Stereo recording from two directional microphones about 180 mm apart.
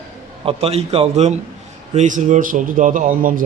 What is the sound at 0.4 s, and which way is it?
A man's voice, 35° right (ahead or behind).